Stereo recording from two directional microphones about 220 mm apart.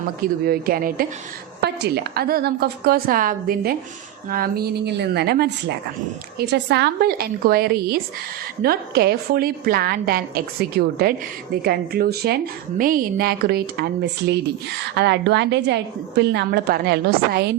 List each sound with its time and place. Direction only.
0.2 s a woman's voice: 40° right (ahead or behind)
14.9 s a woman's voice: 50° right (ahead or behind)